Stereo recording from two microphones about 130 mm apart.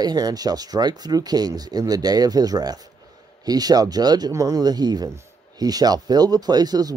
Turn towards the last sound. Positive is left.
turn(degrees=-30)  # may be behind; listen again after turning